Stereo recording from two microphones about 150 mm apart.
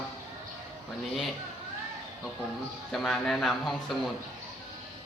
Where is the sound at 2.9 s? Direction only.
Centre (ahead or behind).